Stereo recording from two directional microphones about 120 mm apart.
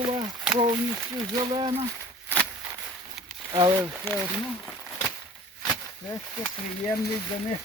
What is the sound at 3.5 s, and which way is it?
Speech, 40° right (ahead or behind).